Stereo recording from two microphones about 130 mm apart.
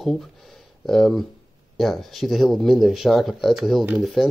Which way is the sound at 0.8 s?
Centre (ahead or behind).